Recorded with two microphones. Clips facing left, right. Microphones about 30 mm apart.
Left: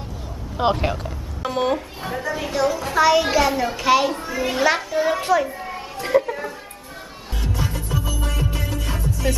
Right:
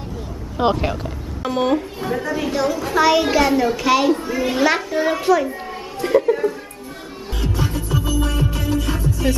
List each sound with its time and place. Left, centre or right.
0.6 s a woman's voice: centre
7.7 s music: right
8.6 s music: centre